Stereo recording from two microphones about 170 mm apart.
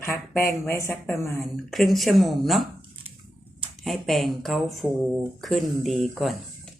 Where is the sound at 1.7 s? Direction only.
Centre (ahead or behind).